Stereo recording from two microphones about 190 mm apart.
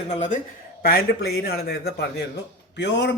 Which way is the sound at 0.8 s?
50° left (ahead or behind).